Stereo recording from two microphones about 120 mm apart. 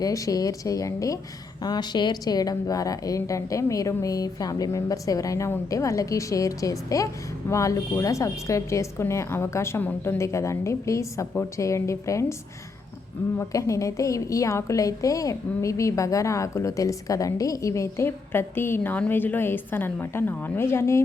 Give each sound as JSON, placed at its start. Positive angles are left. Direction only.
{"t": 0.0, "sound": "a woman's voice", "side_deg": 30}
{"t": 13.4, "sound": "a woman's voice", "side_deg": 25}